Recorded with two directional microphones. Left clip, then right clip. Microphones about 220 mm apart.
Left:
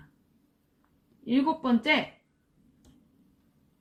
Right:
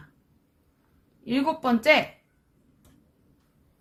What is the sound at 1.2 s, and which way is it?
Speech, 35° right (ahead or behind).